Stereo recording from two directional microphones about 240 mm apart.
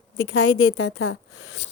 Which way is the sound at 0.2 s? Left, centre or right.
Left.